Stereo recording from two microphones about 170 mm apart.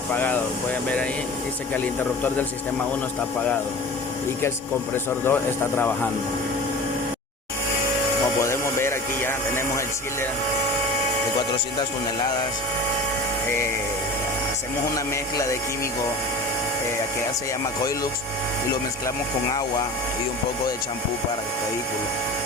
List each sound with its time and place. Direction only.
0.1 s speech: 10° left (ahead or behind)
5.2 s speech: 10° left (ahead or behind)
8.4 s speech: 15° left (ahead or behind)
14.9 s music: 20° left (ahead or behind)